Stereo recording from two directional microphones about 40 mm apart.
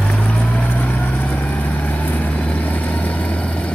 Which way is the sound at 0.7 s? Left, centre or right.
Left.